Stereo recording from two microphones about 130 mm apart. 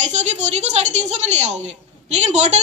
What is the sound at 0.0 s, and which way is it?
A woman's voice, 65° right (ahead or behind).